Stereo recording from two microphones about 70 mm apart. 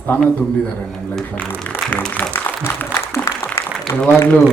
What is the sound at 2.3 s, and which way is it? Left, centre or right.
Applause, left.